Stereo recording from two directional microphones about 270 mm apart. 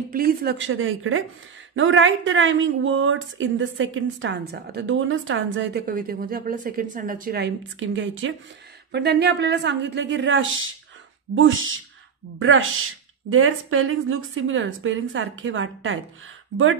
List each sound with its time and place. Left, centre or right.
0.1 s a woman's voice: right
13.3 s a woman's voice: right